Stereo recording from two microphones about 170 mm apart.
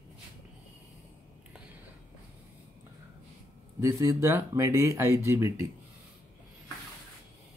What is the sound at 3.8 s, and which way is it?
Speech, 20° right (ahead or behind).